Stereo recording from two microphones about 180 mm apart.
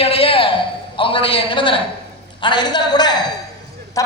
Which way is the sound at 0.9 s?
30° left (ahead or behind).